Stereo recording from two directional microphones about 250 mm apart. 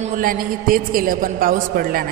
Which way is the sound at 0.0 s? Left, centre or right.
Right.